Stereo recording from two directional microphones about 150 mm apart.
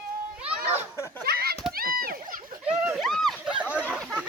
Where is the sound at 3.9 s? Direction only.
10° right (ahead or behind).